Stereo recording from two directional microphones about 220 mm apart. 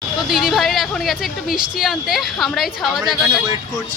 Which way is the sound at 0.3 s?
Centre (ahead or behind).